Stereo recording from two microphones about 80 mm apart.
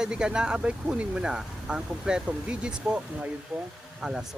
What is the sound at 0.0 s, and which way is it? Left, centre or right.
Speech, centre.